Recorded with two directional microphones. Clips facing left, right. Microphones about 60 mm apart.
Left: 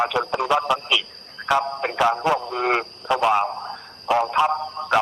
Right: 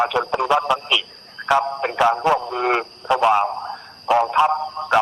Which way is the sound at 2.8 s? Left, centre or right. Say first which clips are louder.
Right 3 dB; centre.